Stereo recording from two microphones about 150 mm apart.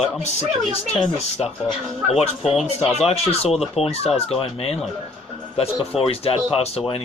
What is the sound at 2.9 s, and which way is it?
Speech, 45° left (ahead or behind).